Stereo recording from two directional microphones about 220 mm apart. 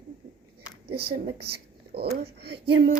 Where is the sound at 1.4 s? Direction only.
45° right (ahead or behind).